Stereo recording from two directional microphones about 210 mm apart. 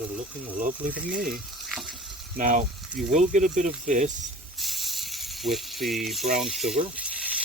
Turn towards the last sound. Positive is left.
turn(degrees=-5)  # may be behind; listen again after turning